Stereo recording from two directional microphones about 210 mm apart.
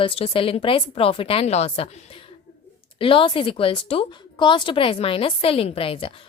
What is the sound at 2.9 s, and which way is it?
A woman's voice, 25° left (ahead or behind).